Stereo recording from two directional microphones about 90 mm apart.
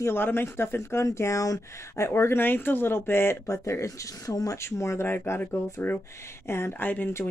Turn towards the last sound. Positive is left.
turn(degrees=20)  # may be behind; listen again after turning